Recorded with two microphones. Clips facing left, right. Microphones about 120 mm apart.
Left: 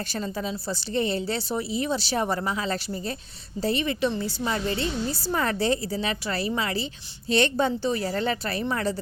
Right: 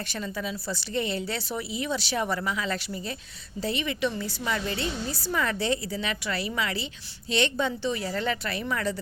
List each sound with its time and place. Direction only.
0.1 s a woman's voice: 35° left (ahead or behind)